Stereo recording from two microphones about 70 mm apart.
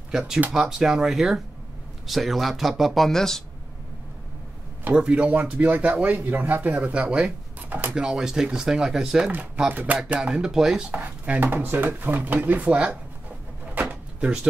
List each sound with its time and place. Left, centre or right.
0.5 s speech: centre
4.9 s speech: centre
9.7 s speech: right; by 10.9 s centre
10.9 s speech: right
13.7 s drawer open or close: centre